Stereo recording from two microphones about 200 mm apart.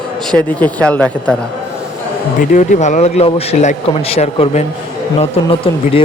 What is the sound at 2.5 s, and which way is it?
A man's voice, 40° left (ahead or behind).